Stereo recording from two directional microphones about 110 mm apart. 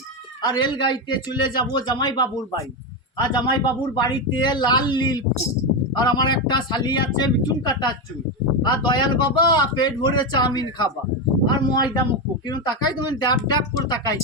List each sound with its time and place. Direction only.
0.4 s speech: 40° left (ahead or behind)